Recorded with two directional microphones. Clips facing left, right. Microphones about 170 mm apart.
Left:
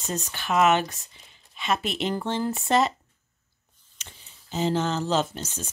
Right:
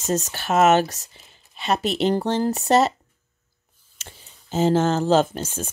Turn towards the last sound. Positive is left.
turn(degrees=-50)  # may be behind; listen again after turning